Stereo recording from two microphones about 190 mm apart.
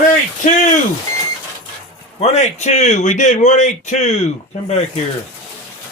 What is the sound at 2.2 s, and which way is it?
A man's voice, 35° left (ahead or behind).